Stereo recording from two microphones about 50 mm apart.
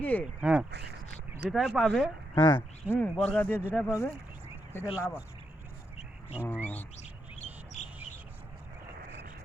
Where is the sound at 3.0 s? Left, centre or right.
Left.